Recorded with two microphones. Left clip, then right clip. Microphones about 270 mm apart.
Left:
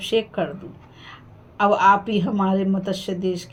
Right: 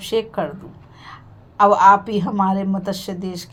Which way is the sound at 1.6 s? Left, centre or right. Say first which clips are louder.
Right 4 dB; right.